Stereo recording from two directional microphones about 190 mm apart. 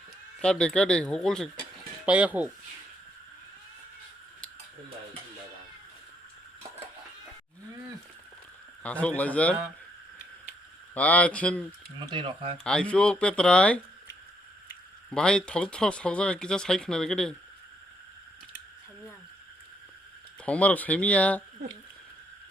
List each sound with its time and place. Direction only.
0.3 s speech: 5° left (ahead or behind)
8.8 s speech: 5° left (ahead or behind)
10.9 s speech: 5° left (ahead or behind)
11.9 s speech: 25° right (ahead or behind)
12.6 s speech: 5° left (ahead or behind)
15.1 s speech: 5° left (ahead or behind)
20.4 s speech: 5° left (ahead or behind)